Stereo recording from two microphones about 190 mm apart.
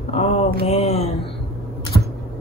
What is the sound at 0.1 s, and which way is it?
Mantra, 35° left (ahead or behind).